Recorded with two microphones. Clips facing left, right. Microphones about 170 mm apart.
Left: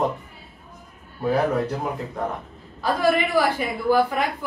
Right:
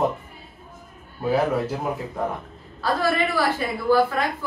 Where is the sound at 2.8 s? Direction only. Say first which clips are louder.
Left 2 dB; 15° left (ahead or behind).